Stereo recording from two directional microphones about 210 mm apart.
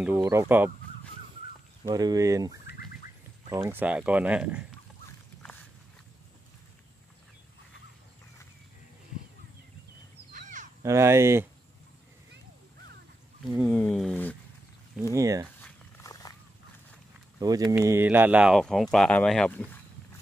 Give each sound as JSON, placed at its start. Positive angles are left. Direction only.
{"t": 0.0, "sound": "speech", "side_deg": -10}
{"t": 1.9, "sound": "speech", "side_deg": -20}
{"t": 10.3, "sound": "a sound", "side_deg": -35}
{"t": 10.8, "sound": "speech", "side_deg": -15}
{"t": 13.6, "sound": "speech", "side_deg": 5}
{"t": 15.1, "sound": "speech", "side_deg": -15}
{"t": 16.0, "sound": "walk", "side_deg": 15}
{"t": 17.4, "sound": "speech", "side_deg": -15}